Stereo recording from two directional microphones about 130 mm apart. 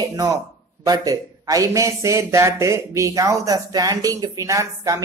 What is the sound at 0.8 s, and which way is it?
A man's voice, 30° right (ahead or behind).